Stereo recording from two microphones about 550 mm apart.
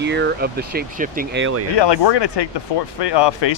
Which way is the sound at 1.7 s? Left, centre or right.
Left.